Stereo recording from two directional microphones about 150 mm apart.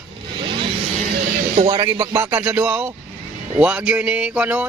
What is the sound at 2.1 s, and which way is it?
Music, 20° right (ahead or behind).